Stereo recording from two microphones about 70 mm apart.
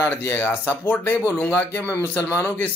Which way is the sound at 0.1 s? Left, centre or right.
Left.